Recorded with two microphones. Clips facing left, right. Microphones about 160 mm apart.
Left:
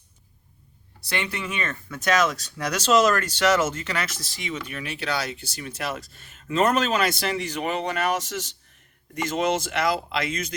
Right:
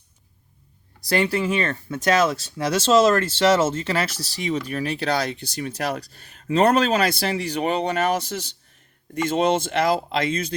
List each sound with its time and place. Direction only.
1.0 s speech: 35° right (ahead or behind)
9.3 s speech: 35° right (ahead or behind)